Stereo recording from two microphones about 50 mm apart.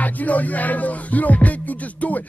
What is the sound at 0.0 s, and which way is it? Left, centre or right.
Music, left.